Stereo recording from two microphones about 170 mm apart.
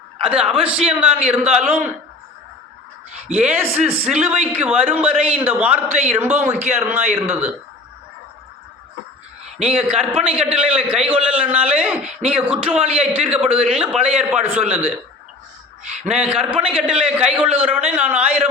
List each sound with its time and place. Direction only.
0.3 s a man's voice: 5° right (ahead or behind)
3.2 s a man's voice: 10° right (ahead or behind)
6.5 s a man's voice: 40° right (ahead or behind)
6.7 s a man's voice: 15° right (ahead or behind)
9.6 s a man's voice: 5° right (ahead or behind)
16.1 s a man's voice: 5° right (ahead or behind)